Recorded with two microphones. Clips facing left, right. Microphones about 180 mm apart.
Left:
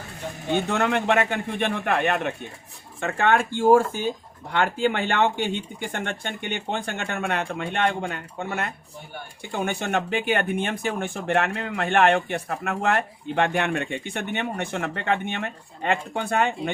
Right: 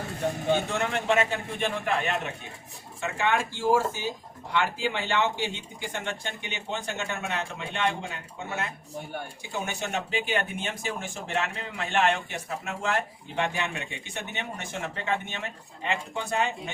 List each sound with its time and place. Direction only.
0.7 s speech: 60° left (ahead or behind)